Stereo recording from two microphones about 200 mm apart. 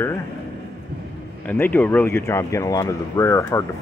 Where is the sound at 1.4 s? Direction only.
10° left (ahead or behind).